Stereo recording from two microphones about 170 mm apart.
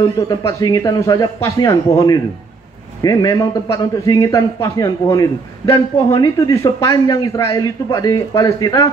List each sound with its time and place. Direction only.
0.3 s a man's voice: 20° left (ahead or behind)